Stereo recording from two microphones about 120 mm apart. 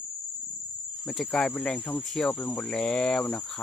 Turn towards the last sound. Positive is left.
turn(degrees=5)  # may be behind; listen again after turning